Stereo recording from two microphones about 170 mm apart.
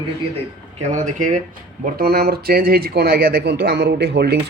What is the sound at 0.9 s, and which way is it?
Speech, 50° right (ahead or behind).